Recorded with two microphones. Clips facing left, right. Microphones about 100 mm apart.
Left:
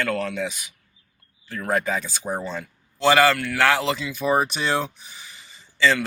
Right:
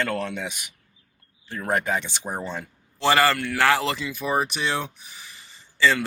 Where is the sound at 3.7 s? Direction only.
15° left (ahead or behind).